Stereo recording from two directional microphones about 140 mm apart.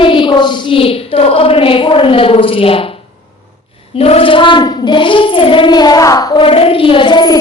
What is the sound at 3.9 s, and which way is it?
A woman's voice, 45° left (ahead or behind).